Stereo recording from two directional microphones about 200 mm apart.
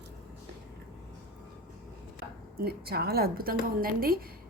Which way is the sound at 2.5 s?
50° right (ahead or behind).